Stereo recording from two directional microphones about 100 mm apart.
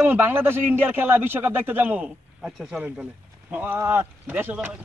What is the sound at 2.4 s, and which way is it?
Speech, 5° right (ahead or behind).